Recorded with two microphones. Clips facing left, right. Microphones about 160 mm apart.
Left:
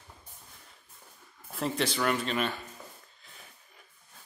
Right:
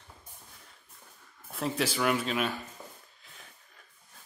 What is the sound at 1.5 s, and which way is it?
Speech, 5° right (ahead or behind).